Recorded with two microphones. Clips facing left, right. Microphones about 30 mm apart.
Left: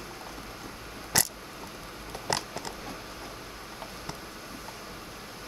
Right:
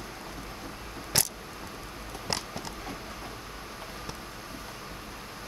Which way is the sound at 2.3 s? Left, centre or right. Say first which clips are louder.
Left 3 dB; left.